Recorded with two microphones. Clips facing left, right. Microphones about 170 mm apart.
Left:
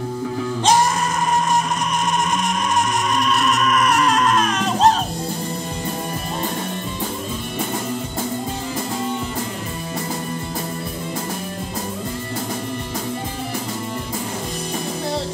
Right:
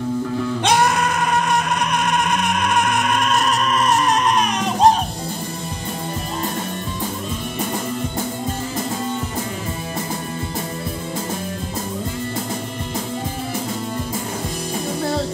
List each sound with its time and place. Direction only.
0.6 s music: 65° right (ahead or behind); by 4.9 s 15° right (ahead or behind)